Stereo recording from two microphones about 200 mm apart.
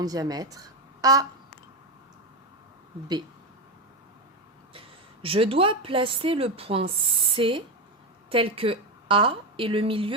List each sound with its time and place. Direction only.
0.0 s a woman's voice: 20° right (ahead or behind)
1.0 s a sound: 20° right (ahead or behind)
5.2 s a woman's voice: 25° right (ahead or behind)